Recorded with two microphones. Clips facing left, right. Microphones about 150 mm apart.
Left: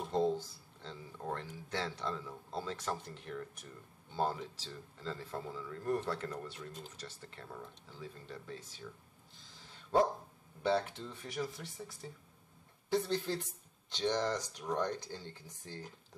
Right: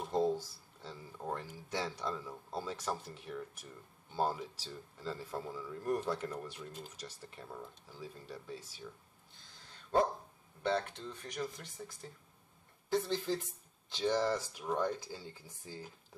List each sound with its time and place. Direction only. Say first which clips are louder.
0.0 s speech: even; 10° right (ahead or behind)
9.4 s a sound: left 1 dB; centre (ahead or behind)
10.6 s speech: left 2 dB; 5° left (ahead or behind)